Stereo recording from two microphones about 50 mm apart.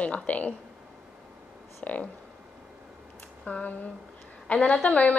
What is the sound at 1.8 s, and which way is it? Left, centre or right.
Speech, left.